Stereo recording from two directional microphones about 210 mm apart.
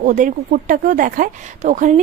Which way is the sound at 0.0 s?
40° right (ahead or behind).